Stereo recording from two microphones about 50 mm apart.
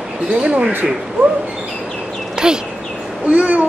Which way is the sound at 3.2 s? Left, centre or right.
Right.